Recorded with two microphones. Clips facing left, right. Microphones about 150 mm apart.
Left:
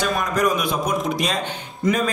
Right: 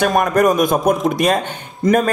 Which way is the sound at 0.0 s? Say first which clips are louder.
Right 7 dB; 55° right (ahead or behind).